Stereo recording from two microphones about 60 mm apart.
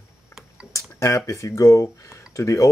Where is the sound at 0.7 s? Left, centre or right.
Left.